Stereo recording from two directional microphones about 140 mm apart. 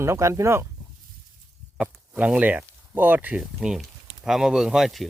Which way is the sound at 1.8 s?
10° right (ahead or behind).